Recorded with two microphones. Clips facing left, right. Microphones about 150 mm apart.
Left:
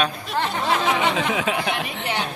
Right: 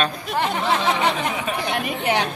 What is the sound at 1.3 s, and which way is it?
Speech, 90° left.